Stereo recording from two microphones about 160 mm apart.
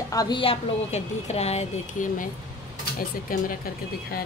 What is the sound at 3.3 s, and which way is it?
Speech, 60° left (ahead or behind).